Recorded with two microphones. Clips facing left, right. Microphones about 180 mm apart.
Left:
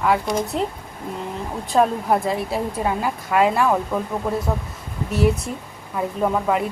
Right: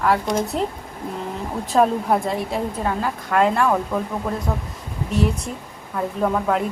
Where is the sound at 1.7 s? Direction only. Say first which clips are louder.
Even; centre (ahead or behind).